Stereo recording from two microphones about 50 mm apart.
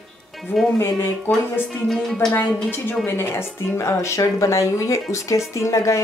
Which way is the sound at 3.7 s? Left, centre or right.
Left.